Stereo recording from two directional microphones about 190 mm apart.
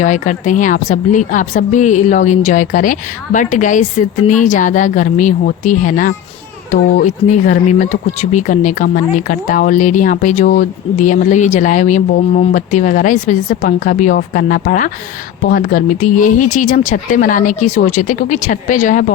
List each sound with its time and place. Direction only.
0.0 s speech: 40° left (ahead or behind)